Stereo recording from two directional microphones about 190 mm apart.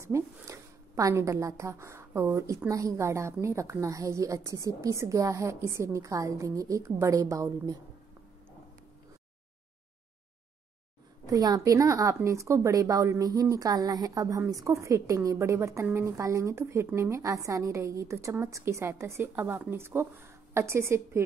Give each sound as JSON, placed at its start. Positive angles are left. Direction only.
{"t": 0.0, "sound": "a woman's voice", "side_deg": -15}
{"t": 11.2, "sound": "a woman's voice", "side_deg": -20}